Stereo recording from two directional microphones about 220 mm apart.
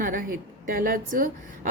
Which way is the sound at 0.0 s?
40° right (ahead or behind).